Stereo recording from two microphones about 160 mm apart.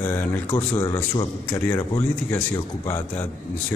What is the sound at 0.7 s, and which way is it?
A man's voice, 15° left (ahead or behind).